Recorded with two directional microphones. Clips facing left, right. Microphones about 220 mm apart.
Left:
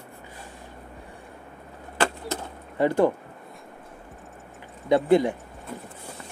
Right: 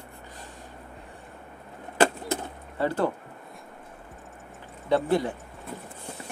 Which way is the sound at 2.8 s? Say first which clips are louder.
Left 5 dB; 15° left (ahead or behind).